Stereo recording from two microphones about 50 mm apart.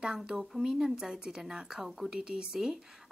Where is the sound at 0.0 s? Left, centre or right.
Centre.